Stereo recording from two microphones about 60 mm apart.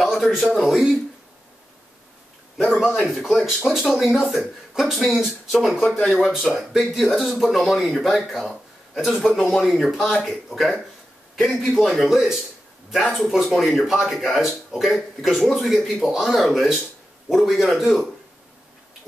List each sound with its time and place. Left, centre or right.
0.0 s a man's voice: centre
2.5 s a man's voice: centre
8.9 s speech: centre